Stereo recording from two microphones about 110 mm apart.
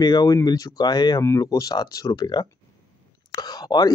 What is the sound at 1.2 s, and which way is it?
Speech, 25° left (ahead or behind).